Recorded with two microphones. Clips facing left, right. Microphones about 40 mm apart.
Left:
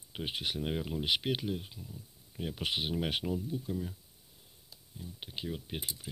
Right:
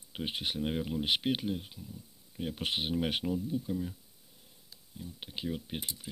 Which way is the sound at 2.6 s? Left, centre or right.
Centre.